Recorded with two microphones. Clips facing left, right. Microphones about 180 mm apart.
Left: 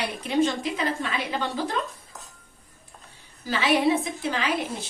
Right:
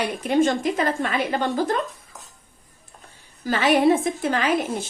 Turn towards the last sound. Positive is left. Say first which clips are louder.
# right 5 dB
turn(degrees=-50)  # may be behind; listen again after turning